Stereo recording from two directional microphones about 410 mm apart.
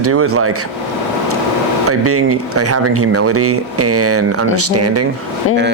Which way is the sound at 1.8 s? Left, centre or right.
Right.